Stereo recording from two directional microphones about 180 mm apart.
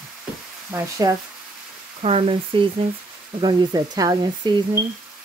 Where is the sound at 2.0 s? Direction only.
35° right (ahead or behind).